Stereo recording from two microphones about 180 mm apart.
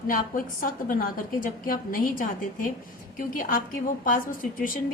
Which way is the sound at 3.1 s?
50° left (ahead or behind).